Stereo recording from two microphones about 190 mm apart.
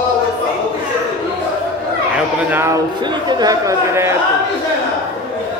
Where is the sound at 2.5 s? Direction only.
15° right (ahead or behind).